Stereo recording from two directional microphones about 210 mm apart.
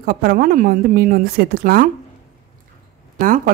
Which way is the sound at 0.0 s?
45° right (ahead or behind).